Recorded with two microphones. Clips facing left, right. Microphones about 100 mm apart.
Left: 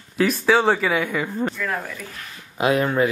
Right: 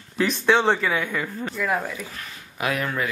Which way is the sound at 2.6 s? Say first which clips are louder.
Left 7 dB; 25° left (ahead or behind).